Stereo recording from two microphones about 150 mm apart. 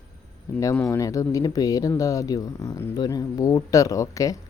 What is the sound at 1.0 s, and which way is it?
Speech, 20° left (ahead or behind).